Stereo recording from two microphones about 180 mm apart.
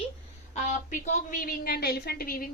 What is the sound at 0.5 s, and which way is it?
A woman's voice, 40° left (ahead or behind).